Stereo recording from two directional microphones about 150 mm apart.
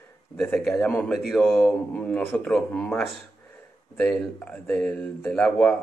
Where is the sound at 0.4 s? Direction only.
5° left (ahead or behind).